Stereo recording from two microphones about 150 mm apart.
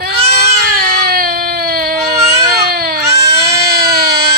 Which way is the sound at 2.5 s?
90° right.